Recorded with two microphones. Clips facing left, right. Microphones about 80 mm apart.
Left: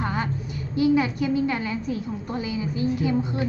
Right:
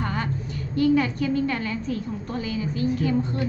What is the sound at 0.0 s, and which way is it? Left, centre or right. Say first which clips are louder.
A woman's voice: left 1 dB; centre.